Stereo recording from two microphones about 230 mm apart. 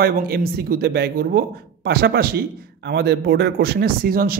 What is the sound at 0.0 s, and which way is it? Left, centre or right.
A man's voice, right.